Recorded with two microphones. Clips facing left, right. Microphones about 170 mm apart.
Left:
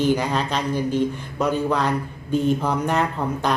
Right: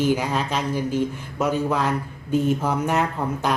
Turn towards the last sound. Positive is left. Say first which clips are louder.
# left 1 dB
turn(degrees=-5)  # may be behind; listen again after turning